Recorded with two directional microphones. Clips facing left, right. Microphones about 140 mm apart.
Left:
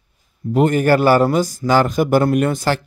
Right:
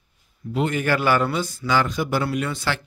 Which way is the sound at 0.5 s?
45° left (ahead or behind).